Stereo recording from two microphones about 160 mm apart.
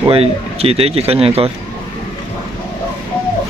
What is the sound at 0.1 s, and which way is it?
Speech, 40° right (ahead or behind).